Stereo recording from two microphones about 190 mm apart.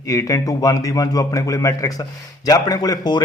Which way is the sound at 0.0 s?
15° left (ahead or behind).